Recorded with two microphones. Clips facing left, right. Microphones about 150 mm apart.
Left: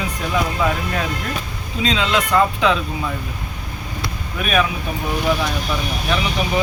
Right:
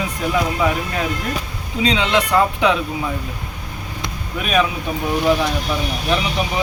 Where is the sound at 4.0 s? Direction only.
20° right (ahead or behind).